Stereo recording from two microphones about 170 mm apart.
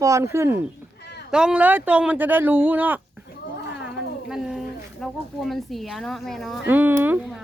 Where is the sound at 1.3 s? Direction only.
5° right (ahead or behind).